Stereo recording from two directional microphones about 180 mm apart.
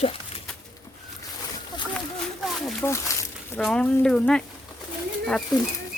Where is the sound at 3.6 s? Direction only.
5° left (ahead or behind).